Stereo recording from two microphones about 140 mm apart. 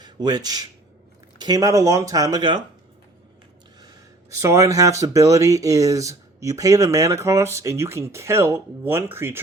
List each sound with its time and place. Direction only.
0.0 s speech: 30° right (ahead or behind)
3.8 s speech: 25° right (ahead or behind)